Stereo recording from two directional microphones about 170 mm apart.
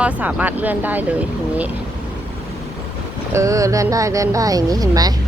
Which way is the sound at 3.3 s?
20° right (ahead or behind).